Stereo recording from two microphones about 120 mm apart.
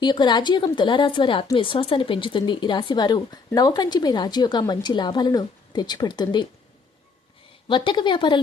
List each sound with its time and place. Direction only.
0.0 s speech: 40° left (ahead or behind)
7.7 s a woman's voice: 40° left (ahead or behind)